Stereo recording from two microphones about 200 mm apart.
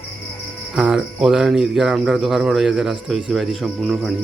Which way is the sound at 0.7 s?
5° right (ahead or behind).